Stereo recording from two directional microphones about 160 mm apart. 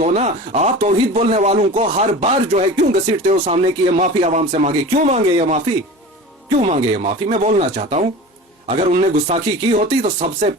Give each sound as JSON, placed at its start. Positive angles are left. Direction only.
{"t": 0.0, "sound": "speech", "side_deg": -45}
{"t": 6.6, "sound": "speech", "side_deg": -40}